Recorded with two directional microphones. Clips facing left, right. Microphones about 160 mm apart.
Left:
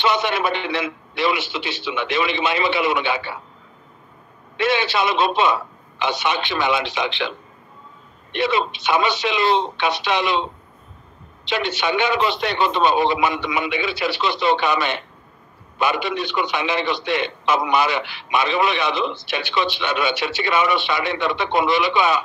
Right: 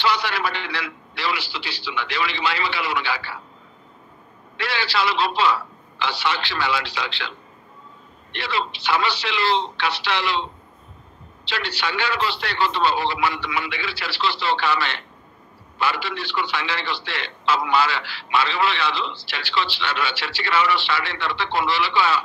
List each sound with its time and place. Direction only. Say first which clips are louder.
0.0 s a man's voice: left 3 dB; 20° left (ahead or behind)
4.6 s a man's voice: left 5 dB; 20° left (ahead or behind)